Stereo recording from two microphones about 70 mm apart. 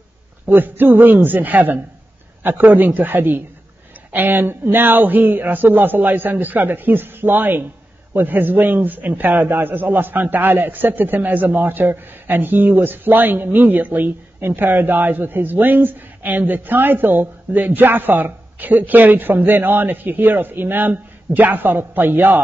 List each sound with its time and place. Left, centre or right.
0.5 s a man's voice: right